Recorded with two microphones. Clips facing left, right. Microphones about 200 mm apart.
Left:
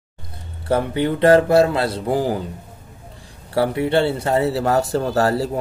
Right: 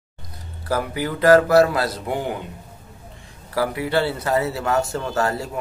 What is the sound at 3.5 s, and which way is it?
Speech, 30° left (ahead or behind).